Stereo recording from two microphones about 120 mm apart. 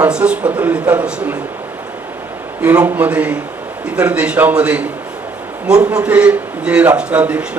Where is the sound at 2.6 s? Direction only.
10° right (ahead or behind).